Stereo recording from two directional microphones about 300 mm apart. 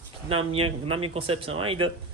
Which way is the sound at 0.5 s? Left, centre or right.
Centre.